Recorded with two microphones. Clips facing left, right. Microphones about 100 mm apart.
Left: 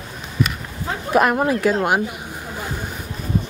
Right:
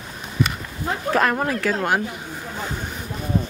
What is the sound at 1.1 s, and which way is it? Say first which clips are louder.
Speech: left 4 dB; 15° left (ahead or behind).